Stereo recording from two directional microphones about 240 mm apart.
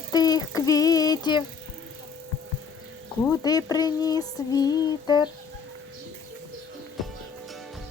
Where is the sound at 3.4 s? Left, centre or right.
Centre.